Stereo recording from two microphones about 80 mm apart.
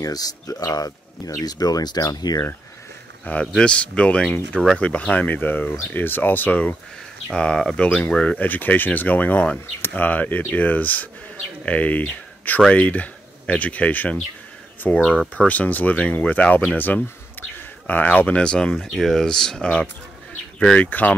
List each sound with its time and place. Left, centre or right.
0.0 s speech: left
3.5 s speech: centre
7.2 s speech: centre